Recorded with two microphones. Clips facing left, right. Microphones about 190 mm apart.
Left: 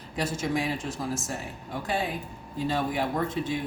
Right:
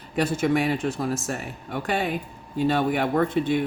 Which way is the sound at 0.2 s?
65° right (ahead or behind).